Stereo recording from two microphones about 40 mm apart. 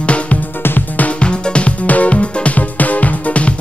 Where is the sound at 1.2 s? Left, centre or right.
Left.